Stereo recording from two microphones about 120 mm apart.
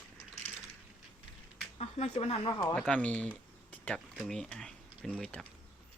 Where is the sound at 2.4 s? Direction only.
40° left (ahead or behind).